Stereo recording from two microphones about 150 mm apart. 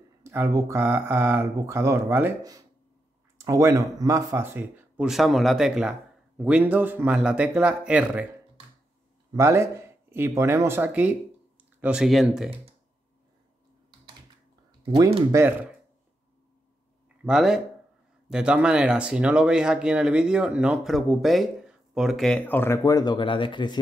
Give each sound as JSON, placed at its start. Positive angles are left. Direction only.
{"t": 0.2, "sound": "speech", "side_deg": -15}
{"t": 3.3, "sound": "speech", "side_deg": -20}
{"t": 5.1, "sound": "speech", "side_deg": 0}
{"t": 9.3, "sound": "speech", "side_deg": -20}
{"t": 14.9, "sound": "speech", "side_deg": -20}
{"t": 17.2, "sound": "speech", "side_deg": -5}